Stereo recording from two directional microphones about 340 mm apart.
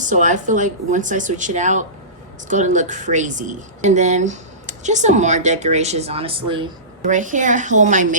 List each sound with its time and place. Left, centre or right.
0.0 s a woman's voice: right